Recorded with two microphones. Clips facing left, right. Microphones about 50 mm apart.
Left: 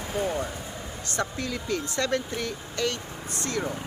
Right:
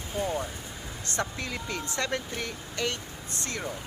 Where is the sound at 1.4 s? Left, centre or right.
Right.